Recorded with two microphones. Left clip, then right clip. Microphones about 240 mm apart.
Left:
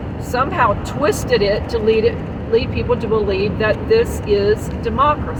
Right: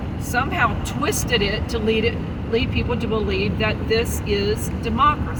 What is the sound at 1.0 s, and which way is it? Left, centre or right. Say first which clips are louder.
Speech: left 5 dB; right.